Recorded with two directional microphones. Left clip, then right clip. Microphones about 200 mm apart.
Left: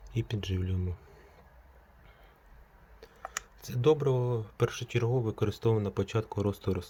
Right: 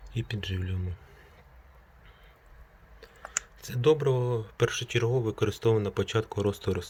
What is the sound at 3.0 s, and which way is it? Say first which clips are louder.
Speech: right 3 dB; 20° left (ahead or behind).